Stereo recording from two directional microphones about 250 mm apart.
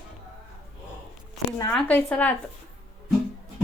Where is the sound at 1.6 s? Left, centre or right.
Centre.